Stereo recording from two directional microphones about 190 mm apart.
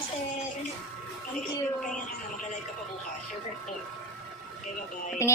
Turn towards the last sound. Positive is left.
turn(degrees=15)  # may be behind; listen again after turning